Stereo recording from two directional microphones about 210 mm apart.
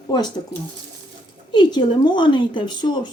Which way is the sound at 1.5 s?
20° left (ahead or behind).